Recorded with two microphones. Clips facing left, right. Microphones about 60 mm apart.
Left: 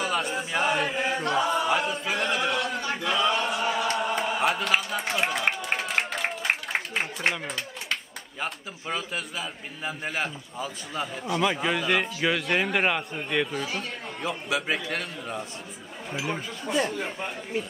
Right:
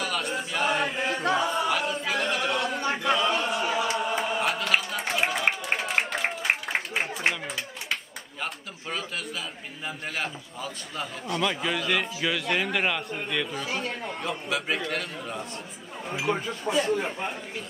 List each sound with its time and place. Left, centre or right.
0.0 s chant: centre
1.9 s a capella: centre
3.0 s chant: centre
5.2 s a sound: centre
8.4 s a man's voice: centre